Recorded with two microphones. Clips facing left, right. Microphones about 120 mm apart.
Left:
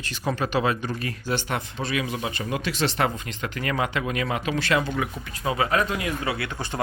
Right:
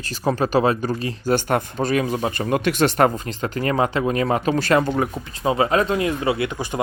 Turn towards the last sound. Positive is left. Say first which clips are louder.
# right 7 dB
turn(degrees=-15)  # may be behind; listen again after turning